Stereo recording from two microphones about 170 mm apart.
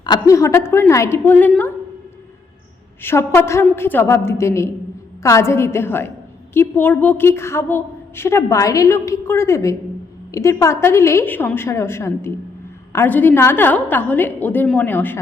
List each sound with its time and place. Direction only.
0.0 s a woman's voice: 20° left (ahead or behind)
3.0 s a woman's voice: 15° left (ahead or behind)